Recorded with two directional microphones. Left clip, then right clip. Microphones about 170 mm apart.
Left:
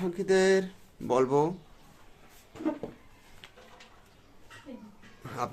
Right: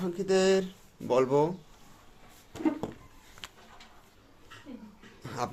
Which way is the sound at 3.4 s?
70° right (ahead or behind).